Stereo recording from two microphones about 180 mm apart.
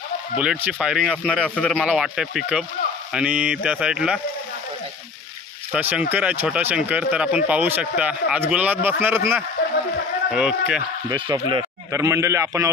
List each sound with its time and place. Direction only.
0.4 s speech: 10° right (ahead or behind)
5.7 s speech: 10° right (ahead or behind)
11.1 s speech: 25° right (ahead or behind)